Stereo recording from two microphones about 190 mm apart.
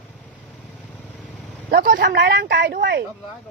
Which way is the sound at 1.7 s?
50° right (ahead or behind).